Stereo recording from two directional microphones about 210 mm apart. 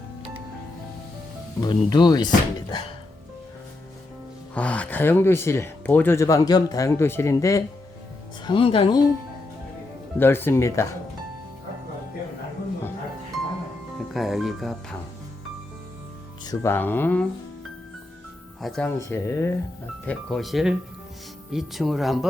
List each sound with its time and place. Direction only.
1.6 s speech: 20° left (ahead or behind)
4.5 s speech: 5° left (ahead or behind); by 9.0 s 25° left (ahead or behind)
10.2 s speech: 10° left (ahead or behind)
14.1 s speech: centre (ahead or behind)
16.4 s speech: 15° left (ahead or behind)
18.6 s speech: 5° left (ahead or behind)
20.1 s speech: 5° left (ahead or behind)